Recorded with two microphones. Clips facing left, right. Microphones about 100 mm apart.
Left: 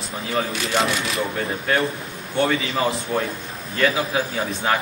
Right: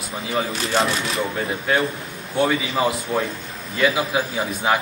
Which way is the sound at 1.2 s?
5° right (ahead or behind).